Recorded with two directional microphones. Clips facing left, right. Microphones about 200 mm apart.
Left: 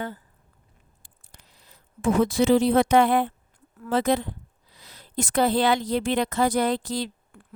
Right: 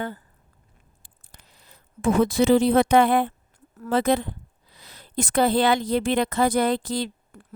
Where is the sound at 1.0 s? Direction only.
55° right (ahead or behind).